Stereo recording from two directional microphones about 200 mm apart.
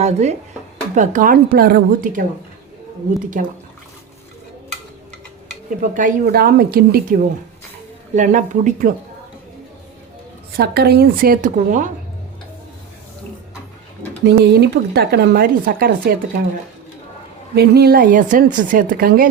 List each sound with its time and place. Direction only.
0.0 s speech: 35° right (ahead or behind)
3.3 s speech: 40° right (ahead or behind)
5.9 s speech: 40° right (ahead or behind)
8.1 s speech: 40° right (ahead or behind)
10.6 s speech: 50° right (ahead or behind)
14.3 s speech: 55° right (ahead or behind)
17.5 s speech: 55° right (ahead or behind)